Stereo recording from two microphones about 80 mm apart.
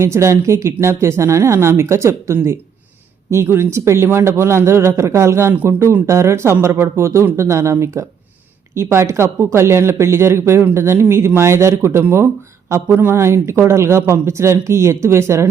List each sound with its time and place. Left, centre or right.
0.0 s speech: right